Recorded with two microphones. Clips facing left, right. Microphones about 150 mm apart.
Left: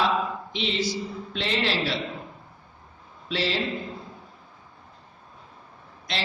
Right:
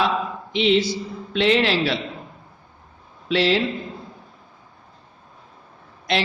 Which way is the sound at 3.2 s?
70° right (ahead or behind).